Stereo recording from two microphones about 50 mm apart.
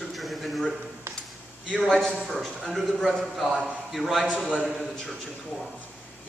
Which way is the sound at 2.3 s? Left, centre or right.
Centre.